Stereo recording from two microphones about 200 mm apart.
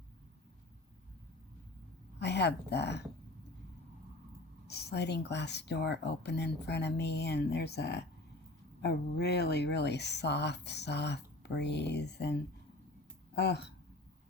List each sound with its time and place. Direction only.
2.1 s speech: 60° left (ahead or behind)
4.7 s speech: 55° left (ahead or behind)
13.3 s speech: 55° left (ahead or behind)